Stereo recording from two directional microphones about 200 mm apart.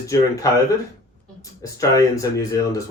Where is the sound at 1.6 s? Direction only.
15° left (ahead or behind).